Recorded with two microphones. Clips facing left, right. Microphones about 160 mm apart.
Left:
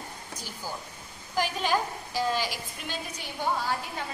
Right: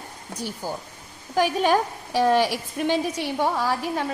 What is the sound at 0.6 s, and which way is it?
A woman's voice, 60° right (ahead or behind).